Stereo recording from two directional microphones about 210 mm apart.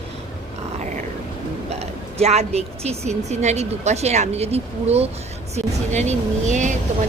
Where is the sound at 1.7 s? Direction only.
30° right (ahead or behind).